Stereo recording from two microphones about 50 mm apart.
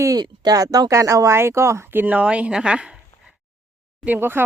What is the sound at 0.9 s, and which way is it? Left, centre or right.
Speech, right.